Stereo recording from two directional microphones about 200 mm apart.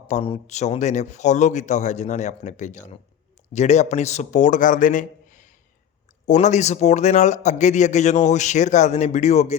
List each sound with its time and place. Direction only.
0.1 s a man's voice: 30° left (ahead or behind)